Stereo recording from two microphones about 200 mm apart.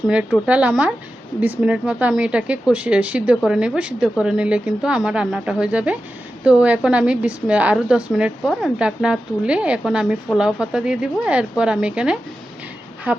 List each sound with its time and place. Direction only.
0.1 s a woman's voice: 5° right (ahead or behind)